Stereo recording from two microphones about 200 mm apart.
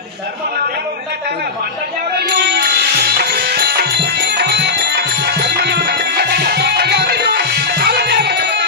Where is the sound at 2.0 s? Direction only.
55° right (ahead or behind).